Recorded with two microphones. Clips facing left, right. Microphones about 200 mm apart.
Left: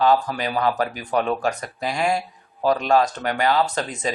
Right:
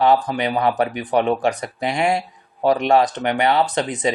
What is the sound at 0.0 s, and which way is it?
Speech, 20° right (ahead or behind).